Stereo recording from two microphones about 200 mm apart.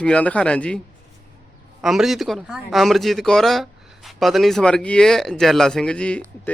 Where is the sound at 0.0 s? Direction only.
5° left (ahead or behind).